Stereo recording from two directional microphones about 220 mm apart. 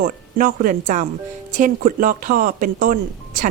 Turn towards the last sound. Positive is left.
turn(degrees=-35)  # may be behind; listen again after turning